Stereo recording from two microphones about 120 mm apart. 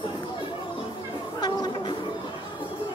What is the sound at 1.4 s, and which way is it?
Chatter, 35° left (ahead or behind).